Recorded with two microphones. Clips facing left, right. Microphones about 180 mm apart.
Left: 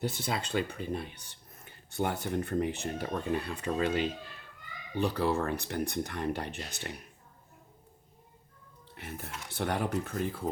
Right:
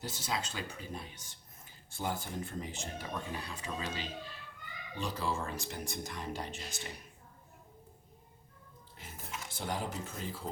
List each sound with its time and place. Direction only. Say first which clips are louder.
0.0 s speech: left 5 dB; 60° left (ahead or behind)
9.0 s speech: left 4 dB; 65° left (ahead or behind)